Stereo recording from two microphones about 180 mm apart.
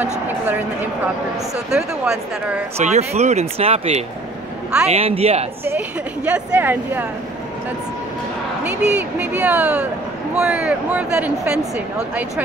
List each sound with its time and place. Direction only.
1.7 s speech: 5° right (ahead or behind)
2.8 s speech: 40° right (ahead or behind)
5.7 s a woman's voice: 10° right (ahead or behind)
8.6 s a woman's voice: 5° right (ahead or behind)